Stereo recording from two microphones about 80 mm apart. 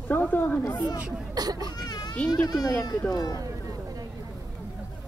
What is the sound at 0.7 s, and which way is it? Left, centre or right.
Speech, left.